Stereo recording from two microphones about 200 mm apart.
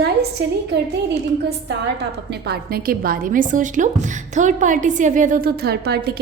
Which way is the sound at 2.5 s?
50° right (ahead or behind).